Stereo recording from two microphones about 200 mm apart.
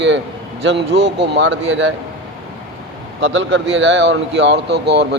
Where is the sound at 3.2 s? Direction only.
70° right (ahead or behind).